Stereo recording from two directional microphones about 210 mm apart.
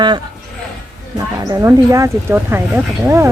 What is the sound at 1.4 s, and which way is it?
Speech, 15° right (ahead or behind).